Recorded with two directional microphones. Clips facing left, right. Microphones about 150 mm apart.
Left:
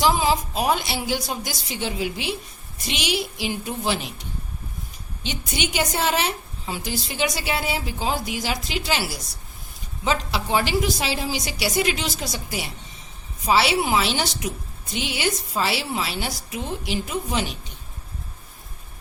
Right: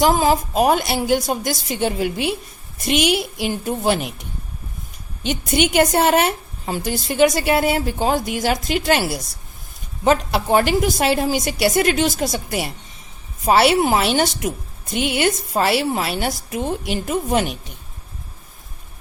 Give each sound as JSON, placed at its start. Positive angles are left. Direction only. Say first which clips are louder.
{"t": 0.0, "sound": "a woman's voice", "louder": "right 4 dB", "side_deg": -45}
{"t": 5.5, "sound": "a woman's voice", "louder": "right 9 dB", "side_deg": -55}